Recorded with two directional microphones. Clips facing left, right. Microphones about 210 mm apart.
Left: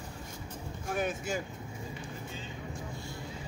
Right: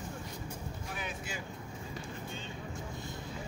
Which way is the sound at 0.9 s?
45° left (ahead or behind).